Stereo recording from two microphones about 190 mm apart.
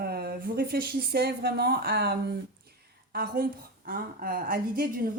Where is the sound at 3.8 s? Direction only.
50° right (ahead or behind).